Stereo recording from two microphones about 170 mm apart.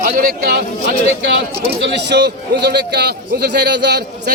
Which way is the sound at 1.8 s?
85° right.